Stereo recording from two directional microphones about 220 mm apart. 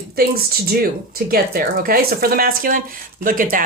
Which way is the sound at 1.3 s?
40° right (ahead or behind).